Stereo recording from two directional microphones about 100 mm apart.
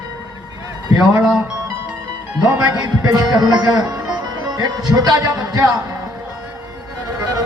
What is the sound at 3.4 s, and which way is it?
A man's voice, 40° right (ahead or behind).